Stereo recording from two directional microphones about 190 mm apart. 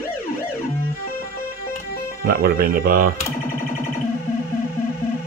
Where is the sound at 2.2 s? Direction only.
50° right (ahead or behind).